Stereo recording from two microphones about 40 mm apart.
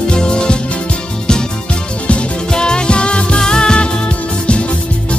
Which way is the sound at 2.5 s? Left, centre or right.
Left.